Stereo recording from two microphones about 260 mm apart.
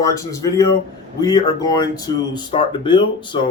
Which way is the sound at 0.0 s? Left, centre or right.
Centre.